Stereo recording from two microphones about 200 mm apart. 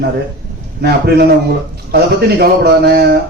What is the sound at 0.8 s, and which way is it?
Speech, 50° right (ahead or behind).